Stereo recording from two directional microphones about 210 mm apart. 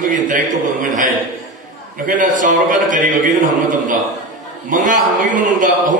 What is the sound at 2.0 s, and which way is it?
A man's voice, 40° right (ahead or behind).